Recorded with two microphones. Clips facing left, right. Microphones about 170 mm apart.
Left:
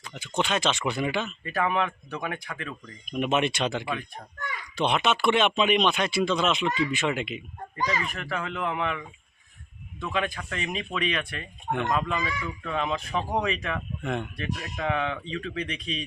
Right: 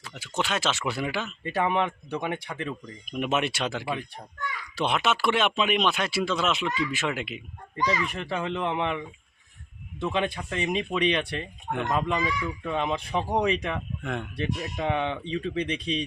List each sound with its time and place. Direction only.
0.0 s speech: 5° right (ahead or behind)
1.5 s speech: 25° right (ahead or behind)
3.1 s speech: 5° right (ahead or behind)
8.1 s speech: 25° right (ahead or behind)
14.0 s speech: centre (ahead or behind)
14.3 s speech: 25° right (ahead or behind)